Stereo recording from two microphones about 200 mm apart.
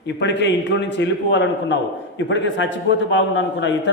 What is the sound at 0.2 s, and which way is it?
A man's voice, 60° left (ahead or behind).